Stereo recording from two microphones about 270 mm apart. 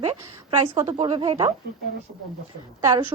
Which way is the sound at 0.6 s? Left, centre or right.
Right.